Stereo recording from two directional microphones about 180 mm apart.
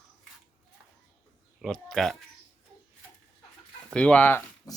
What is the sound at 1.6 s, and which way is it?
Speech, centre (ahead or behind).